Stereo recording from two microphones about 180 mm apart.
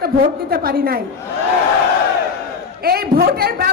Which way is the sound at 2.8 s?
60° right (ahead or behind).